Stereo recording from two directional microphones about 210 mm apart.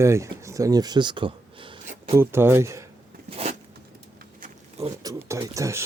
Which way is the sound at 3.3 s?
30° right (ahead or behind).